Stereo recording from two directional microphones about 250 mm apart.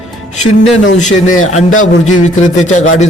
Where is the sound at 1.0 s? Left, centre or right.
Left.